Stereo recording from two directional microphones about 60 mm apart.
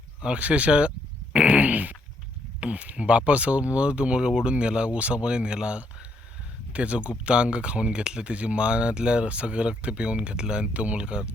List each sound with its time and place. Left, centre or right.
0.2 s speech: centre